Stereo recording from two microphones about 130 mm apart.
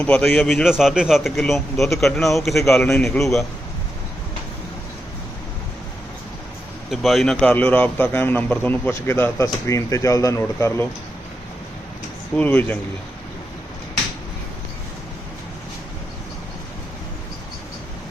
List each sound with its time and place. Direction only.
0.0 s a man's voice: 10° left (ahead or behind)
2.8 s a man's voice: 20° left (ahead or behind)
3.2 s a man's voice: centre (ahead or behind)
6.9 s a man's voice: centre (ahead or behind); by 10.8 s 20° left (ahead or behind)
12.4 s a man's voice: 15° left (ahead or behind)